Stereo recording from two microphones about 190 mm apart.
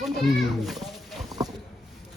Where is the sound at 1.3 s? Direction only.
20° right (ahead or behind).